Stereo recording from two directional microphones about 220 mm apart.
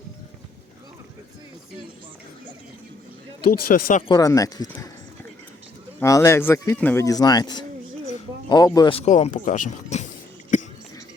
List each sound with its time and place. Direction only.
3.4 s speech: 40° left (ahead or behind)
4.1 s speech: 15° left (ahead or behind)
6.0 s speech: 15° left (ahead or behind); by 10.1 s 35° left (ahead or behind)